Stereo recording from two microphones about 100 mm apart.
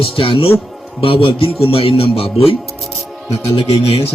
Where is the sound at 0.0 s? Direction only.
65° left (ahead or behind).